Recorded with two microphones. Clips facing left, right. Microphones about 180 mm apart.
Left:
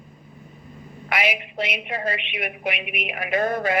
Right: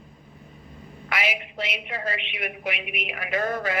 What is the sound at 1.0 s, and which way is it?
A woman's voice, 15° left (ahead or behind).